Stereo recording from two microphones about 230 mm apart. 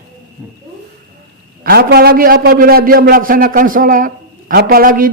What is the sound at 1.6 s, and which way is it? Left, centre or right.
A man's voice, right.